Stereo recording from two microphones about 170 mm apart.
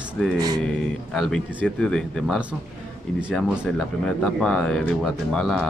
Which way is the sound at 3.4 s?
5° right (ahead or behind).